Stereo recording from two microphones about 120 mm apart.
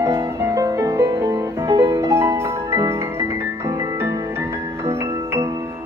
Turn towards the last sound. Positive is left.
turn(degrees=-20)  # may be behind; listen again after turning